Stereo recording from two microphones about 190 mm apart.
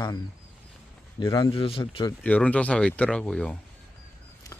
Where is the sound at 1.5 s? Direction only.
30° left (ahead or behind).